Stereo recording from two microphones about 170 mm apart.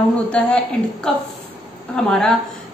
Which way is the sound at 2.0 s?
5° left (ahead or behind).